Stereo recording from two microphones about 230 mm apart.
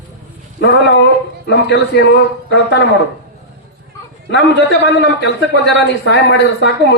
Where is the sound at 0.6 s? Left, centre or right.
Left.